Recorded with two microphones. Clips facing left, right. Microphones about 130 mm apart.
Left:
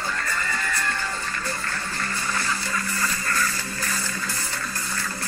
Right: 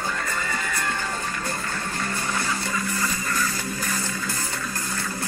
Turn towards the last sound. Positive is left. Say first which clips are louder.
# right 2 dB
turn(degrees=-15)  # may be behind; listen again after turning